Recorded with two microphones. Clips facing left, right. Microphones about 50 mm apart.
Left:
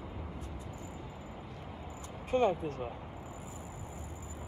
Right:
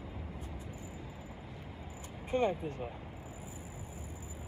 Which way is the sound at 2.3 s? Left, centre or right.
Right.